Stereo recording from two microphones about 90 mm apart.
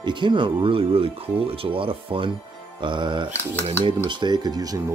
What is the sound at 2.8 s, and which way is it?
Speech, 60° right (ahead or behind).